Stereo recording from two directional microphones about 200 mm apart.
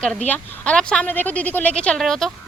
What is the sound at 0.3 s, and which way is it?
Speech, 5° left (ahead or behind).